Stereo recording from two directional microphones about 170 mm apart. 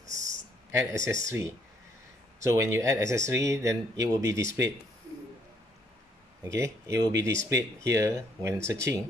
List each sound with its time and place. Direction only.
0.0 s a sound: 45° right (ahead or behind)
0.7 s speech: 15° right (ahead or behind)
6.4 s speech: 15° right (ahead or behind)